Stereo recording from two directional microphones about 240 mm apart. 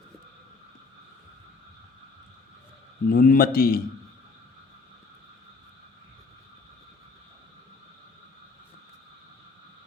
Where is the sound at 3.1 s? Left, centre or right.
Left.